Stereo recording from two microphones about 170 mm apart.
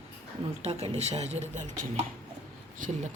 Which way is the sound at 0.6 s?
40° right (ahead or behind).